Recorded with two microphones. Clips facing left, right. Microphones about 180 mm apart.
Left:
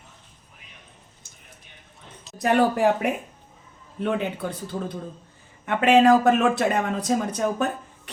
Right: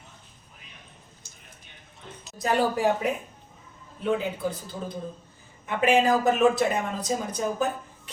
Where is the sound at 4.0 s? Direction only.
65° left (ahead or behind).